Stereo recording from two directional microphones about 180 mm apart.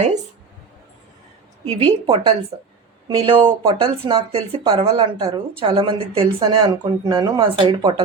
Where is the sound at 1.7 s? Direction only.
30° right (ahead or behind).